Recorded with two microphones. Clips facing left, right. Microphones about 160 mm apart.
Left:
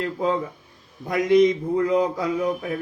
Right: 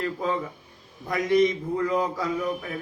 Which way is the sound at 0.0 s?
20° left (ahead or behind).